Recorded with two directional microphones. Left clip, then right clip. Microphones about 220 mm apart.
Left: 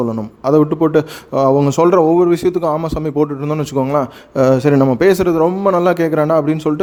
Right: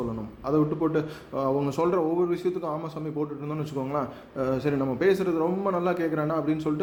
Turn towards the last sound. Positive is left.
turn(degrees=45)  # may be behind; listen again after turning